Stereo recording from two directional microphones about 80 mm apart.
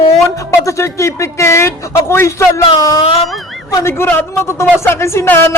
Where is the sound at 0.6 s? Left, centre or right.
Left.